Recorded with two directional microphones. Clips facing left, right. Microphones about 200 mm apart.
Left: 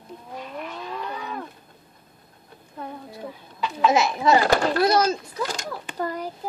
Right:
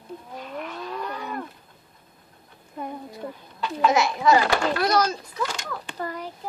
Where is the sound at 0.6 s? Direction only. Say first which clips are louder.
Right 2 dB; centre (ahead or behind).